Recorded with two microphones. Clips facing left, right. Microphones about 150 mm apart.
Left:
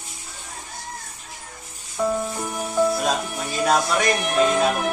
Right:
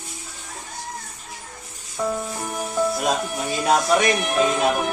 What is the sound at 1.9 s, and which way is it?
Music, centre (ahead or behind).